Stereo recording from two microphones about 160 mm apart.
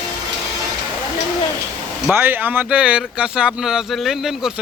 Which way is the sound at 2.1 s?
15° right (ahead or behind).